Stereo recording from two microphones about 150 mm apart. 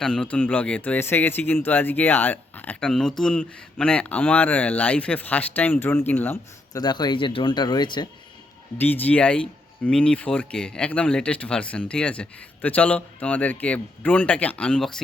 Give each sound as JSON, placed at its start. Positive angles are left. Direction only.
{"t": 0.0, "sound": "speech", "side_deg": 5}
{"t": 6.7, "sound": "speech", "side_deg": 30}
{"t": 8.8, "sound": "speech", "side_deg": 10}